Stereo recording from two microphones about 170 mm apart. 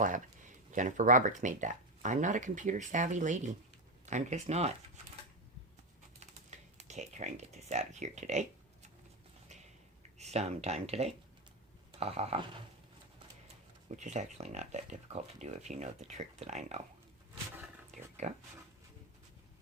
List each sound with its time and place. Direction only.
0.0 s speech: 50° right (ahead or behind)
6.5 s computer keyboard: 45° right (ahead or behind)
6.8 s speech: 40° right (ahead or behind)
10.2 s speech: 40° right (ahead or behind)
13.8 s speech: 45° right (ahead or behind)
18.2 s speech: 40° right (ahead or behind)